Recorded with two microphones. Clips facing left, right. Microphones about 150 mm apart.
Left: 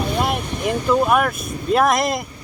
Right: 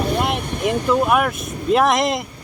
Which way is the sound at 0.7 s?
15° right (ahead or behind).